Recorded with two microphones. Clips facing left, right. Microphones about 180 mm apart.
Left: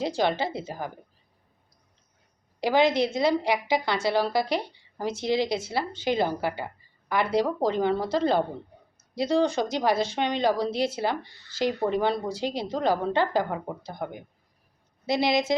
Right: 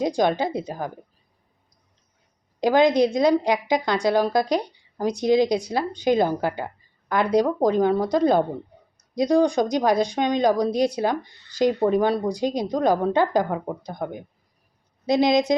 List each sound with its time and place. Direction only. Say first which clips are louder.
0.0 s speech: right 4 dB; 15° right (ahead or behind)
2.6 s speech: right 5 dB; 15° right (ahead or behind)
15.0 s speech: right 5 dB; 20° right (ahead or behind)